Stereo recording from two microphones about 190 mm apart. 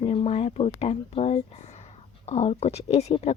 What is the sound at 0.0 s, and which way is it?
Speech, 30° left (ahead or behind).